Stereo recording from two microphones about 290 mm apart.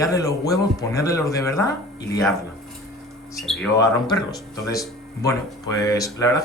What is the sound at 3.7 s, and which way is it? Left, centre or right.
Speech, centre.